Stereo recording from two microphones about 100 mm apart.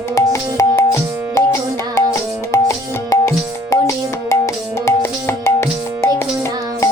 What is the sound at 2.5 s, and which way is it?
Music, 30° left (ahead or behind).